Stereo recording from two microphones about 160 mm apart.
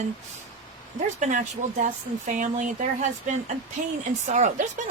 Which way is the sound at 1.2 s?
50° right (ahead or behind).